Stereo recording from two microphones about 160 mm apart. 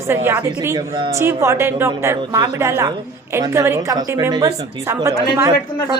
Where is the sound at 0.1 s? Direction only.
15° right (ahead or behind).